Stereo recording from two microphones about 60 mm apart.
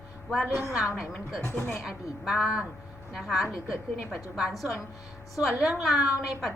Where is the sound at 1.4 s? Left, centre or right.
Left.